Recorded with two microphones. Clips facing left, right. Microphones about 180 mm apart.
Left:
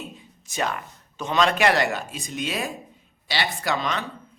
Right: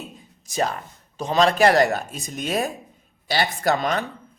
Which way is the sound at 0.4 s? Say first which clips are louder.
Right 3 dB; 35° right (ahead or behind).